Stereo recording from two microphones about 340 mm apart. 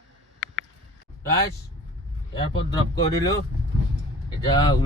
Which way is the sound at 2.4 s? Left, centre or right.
Centre.